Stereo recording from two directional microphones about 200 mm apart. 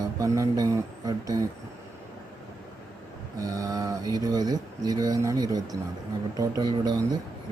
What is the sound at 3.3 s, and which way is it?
Speech, 15° right (ahead or behind).